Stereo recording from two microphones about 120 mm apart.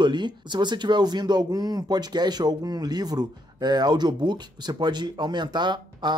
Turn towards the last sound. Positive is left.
turn(degrees=-35)  # may be behind; listen again after turning